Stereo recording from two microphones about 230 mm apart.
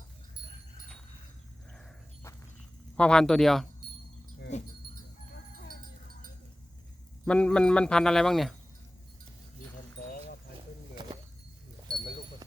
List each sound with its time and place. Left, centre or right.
2.9 s a man's voice: centre
4.5 s dog: left
7.3 s a man's voice: centre